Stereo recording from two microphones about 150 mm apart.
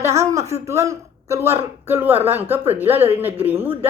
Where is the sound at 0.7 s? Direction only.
20° right (ahead or behind).